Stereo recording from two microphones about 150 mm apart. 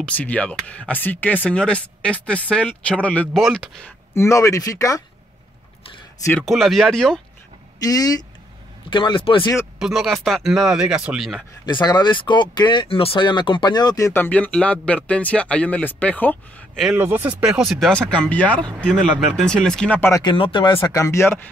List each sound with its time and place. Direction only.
0.0 s speech: 10° left (ahead or behind)
4.1 s speech: 20° left (ahead or behind)
6.4 s speech: centre (ahead or behind)
7.8 s speech: 25° left (ahead or behind)
9.8 s speech: 5° right (ahead or behind)
11.6 s speech: 30° left (ahead or behind); by 16.8 s 10° left (ahead or behind)
16.9 s speech: 15° right (ahead or behind); by 21.4 s 20° left (ahead or behind)